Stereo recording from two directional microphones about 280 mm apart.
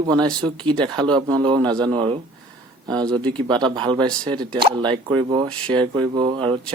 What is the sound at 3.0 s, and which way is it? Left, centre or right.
Speech, centre.